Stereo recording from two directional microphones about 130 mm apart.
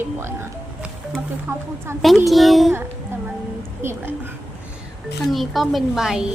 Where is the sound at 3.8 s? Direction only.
20° right (ahead or behind).